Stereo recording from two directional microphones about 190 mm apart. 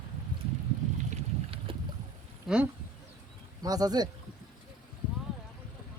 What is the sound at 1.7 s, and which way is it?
Boat, 25° right (ahead or behind).